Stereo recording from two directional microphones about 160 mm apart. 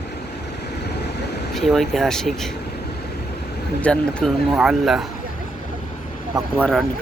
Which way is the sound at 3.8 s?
10° left (ahead or behind).